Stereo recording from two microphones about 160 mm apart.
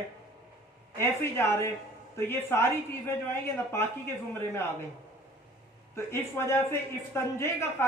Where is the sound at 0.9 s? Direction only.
15° left (ahead or behind).